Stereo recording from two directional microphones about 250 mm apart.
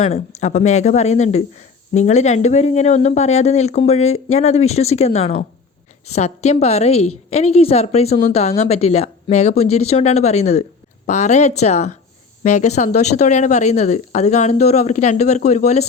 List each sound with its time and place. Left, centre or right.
0.0 s speech: left